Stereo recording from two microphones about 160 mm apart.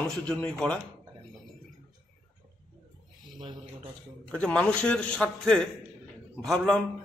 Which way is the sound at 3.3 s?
30° right (ahead or behind).